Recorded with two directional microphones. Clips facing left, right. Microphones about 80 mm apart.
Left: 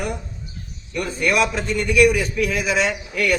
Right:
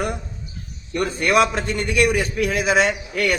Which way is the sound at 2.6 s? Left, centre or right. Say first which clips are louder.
Right 3 dB; right.